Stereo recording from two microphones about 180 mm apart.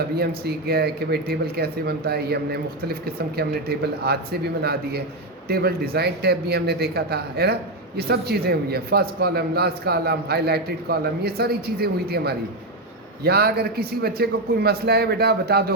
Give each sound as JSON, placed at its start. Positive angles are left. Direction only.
{"t": 0.2, "sound": "speech", "side_deg": -60}